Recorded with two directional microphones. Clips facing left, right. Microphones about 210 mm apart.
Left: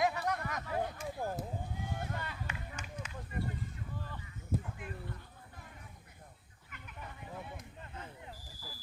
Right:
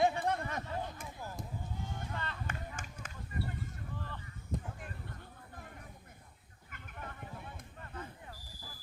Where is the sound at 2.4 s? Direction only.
50° right (ahead or behind).